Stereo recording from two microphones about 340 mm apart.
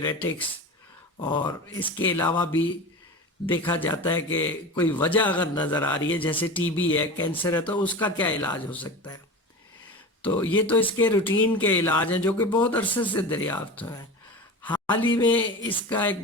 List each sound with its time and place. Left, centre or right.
0.0 s a man's voice: centre
10.2 s a man's voice: centre
15.4 s speech: left
15.9 s a man's voice: centre